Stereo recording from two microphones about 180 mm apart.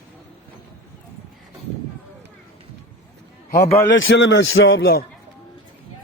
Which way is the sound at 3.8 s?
90° left.